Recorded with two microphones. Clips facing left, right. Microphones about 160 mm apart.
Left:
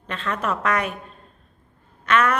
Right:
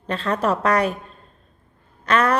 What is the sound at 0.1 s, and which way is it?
Speech, 35° right (ahead or behind).